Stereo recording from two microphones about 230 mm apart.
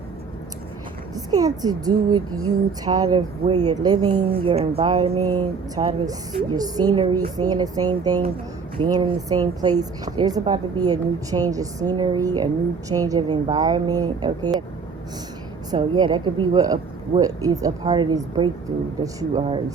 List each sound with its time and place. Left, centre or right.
1.1 s speech: centre
2.0 s a sound: right
2.8 s speech: centre
5.2 s a sound: centre
5.7 s speech: centre
15.7 s speech: centre